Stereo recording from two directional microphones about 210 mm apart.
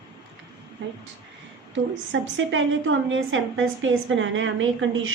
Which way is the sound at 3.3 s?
65° right (ahead or behind).